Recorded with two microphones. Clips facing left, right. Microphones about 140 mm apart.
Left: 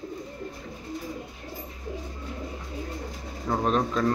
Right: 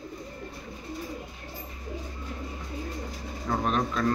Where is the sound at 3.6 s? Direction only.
30° left (ahead or behind).